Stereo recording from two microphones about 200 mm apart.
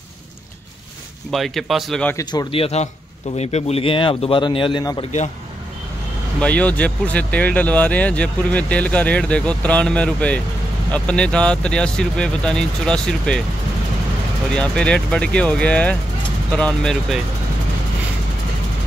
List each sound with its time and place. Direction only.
1.3 s speech: centre (ahead or behind)
2.1 s a man's voice: 25° left (ahead or behind)
6.4 s speech: 5° left (ahead or behind)
14.5 s speech: 5° left (ahead or behind)